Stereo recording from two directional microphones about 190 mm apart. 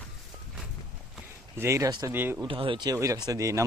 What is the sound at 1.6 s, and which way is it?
Speech, 15° right (ahead or behind).